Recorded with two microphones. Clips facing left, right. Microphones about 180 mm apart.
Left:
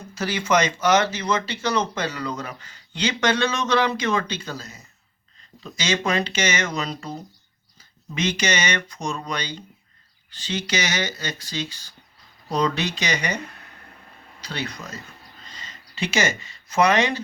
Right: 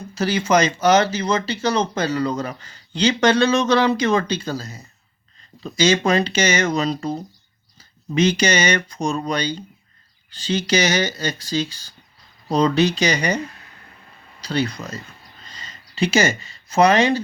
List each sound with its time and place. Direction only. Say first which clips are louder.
0.1 s speech: right 4 dB; 30° right (ahead or behind)
14.4 s speech: right 8 dB; 35° right (ahead or behind)